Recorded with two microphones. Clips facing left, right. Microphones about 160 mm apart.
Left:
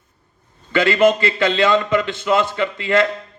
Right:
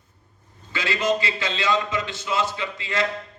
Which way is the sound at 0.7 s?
60° left (ahead or behind).